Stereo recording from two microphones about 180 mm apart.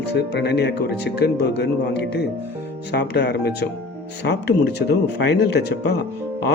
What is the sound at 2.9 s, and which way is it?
Speech, 65° left (ahead or behind).